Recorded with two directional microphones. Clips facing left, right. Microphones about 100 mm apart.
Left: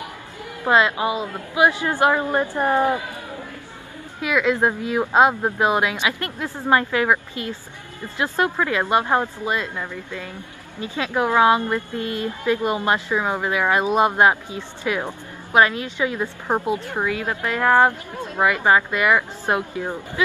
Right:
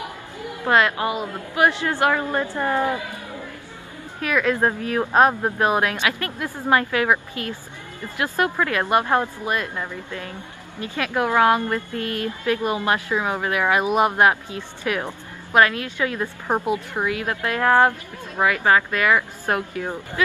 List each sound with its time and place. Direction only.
0.7 s speech: 20° left (ahead or behind)
4.2 s speech: 15° left (ahead or behind)
13.7 s speech: 15° right (ahead or behind)
14.0 s speech: 20° left (ahead or behind)